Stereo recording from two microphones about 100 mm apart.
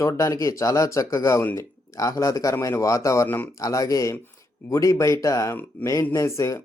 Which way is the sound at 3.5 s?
35° left (ahead or behind).